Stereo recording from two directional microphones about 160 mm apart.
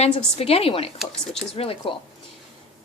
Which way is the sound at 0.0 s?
40° left (ahead or behind).